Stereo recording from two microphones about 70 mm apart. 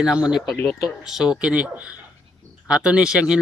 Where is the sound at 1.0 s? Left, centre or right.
Centre.